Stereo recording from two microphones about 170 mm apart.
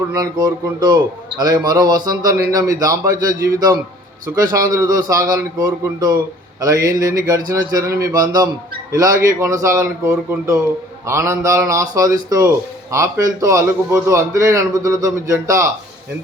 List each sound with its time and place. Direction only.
0.1 s a man's voice: 20° right (ahead or behind)